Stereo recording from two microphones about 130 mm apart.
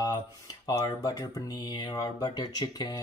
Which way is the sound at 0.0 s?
30° left (ahead or behind).